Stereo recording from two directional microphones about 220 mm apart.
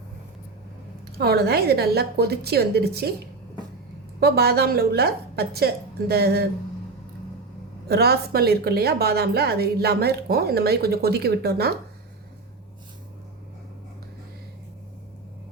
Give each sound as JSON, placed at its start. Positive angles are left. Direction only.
{"t": 1.2, "sound": "a woman's voice", "side_deg": -45}
{"t": 7.9, "sound": "a woman's voice", "side_deg": -45}